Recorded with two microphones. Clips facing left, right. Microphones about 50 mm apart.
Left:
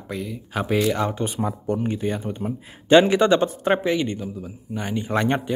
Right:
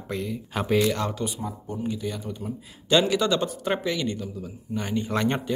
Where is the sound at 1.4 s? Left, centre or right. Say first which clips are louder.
Left 8 dB; left.